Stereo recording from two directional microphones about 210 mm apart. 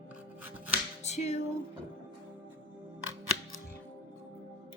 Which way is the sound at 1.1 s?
30° left (ahead or behind).